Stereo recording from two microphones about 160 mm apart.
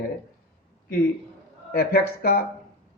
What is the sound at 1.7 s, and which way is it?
Speech, 75° left (ahead or behind).